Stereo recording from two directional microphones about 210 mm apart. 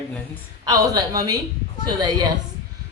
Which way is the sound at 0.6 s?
20° right (ahead or behind).